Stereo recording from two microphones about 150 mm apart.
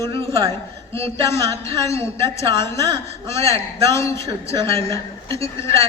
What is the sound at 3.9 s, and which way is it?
A woman's voice, 20° left (ahead or behind).